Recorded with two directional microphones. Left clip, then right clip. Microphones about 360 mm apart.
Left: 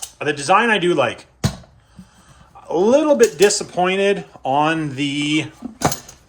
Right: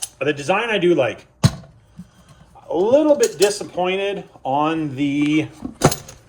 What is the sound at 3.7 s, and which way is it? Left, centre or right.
Speech, left.